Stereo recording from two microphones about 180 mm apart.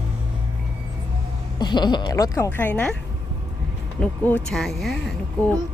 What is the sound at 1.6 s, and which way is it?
A woman's voice, 25° left (ahead or behind).